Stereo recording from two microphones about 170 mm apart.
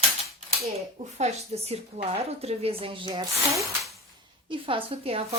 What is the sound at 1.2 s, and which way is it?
A woman's voice, 40° right (ahead or behind).